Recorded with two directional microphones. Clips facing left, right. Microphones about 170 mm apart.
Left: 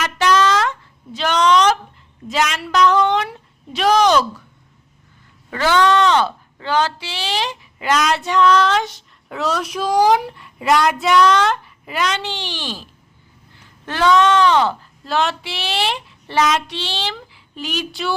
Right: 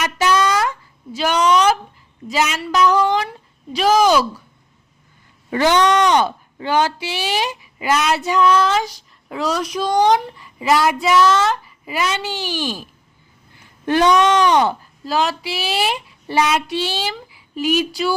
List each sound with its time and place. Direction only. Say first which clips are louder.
0.0 s a sound: left 1 dB; 10° right (ahead or behind)
5.5 s speech: right 1 dB; 20° right (ahead or behind)
15.0 s speech: right 1 dB; centre (ahead or behind)